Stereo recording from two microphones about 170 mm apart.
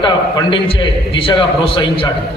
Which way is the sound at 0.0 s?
30° left (ahead or behind).